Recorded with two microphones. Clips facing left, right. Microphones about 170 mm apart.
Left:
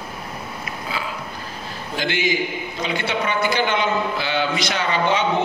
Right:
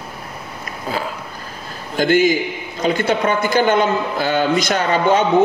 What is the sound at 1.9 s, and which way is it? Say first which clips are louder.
A man's voice: right 8 dB; 45° right (ahead or behind).